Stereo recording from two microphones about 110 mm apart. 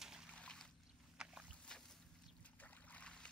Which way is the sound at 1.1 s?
5° right (ahead or behind).